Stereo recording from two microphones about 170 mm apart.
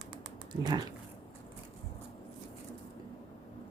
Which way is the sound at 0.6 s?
25° right (ahead or behind).